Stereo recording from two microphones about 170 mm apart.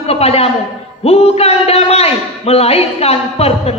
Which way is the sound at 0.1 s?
35° left (ahead or behind).